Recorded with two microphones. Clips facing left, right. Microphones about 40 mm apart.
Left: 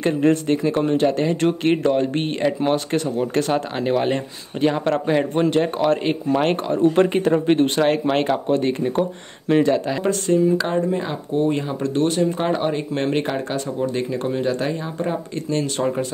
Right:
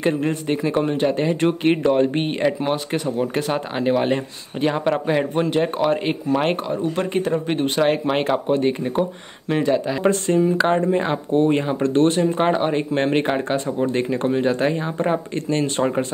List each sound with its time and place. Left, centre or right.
0.3 s speech: centre
10.0 s speech: right